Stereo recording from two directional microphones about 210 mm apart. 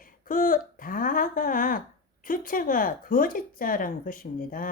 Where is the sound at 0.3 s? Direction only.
40° left (ahead or behind).